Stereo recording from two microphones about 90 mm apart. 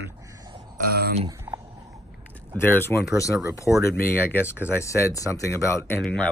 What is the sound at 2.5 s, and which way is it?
Speech, 25° left (ahead or behind).